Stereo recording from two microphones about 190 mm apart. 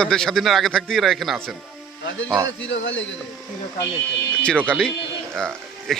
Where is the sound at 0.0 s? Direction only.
5° left (ahead or behind).